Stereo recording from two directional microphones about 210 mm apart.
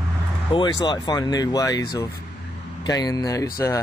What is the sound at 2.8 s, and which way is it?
Speech, 20° left (ahead or behind).